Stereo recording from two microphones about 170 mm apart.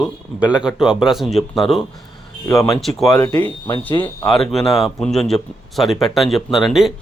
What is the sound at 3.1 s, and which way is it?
Speech, 20° left (ahead or behind).